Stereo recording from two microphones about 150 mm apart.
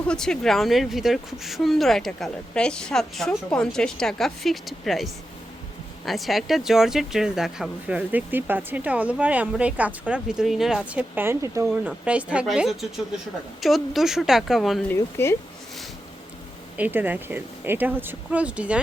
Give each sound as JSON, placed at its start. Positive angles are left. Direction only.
{"t": 0.1, "sound": "a woman's voice", "side_deg": 5}
{"t": 14.8, "sound": "speech", "side_deg": 15}
{"t": 16.7, "sound": "a woman's voice", "side_deg": -10}